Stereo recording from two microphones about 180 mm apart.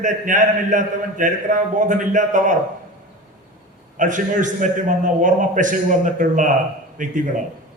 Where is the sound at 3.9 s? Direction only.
45° right (ahead or behind).